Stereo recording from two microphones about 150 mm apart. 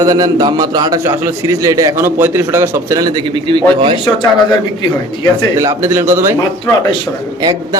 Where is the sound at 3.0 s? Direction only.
30° right (ahead or behind).